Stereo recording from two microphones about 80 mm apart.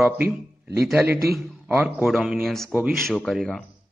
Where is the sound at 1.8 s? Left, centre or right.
Centre.